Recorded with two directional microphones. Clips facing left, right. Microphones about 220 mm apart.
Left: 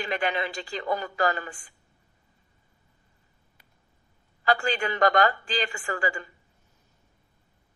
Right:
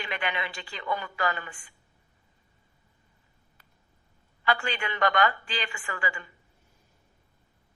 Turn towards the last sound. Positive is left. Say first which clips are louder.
# left 5 dB
turn(degrees=40)  # may be behind; listen again after turning